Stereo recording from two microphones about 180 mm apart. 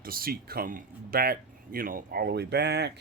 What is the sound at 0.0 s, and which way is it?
Speech, 55° right (ahead or behind).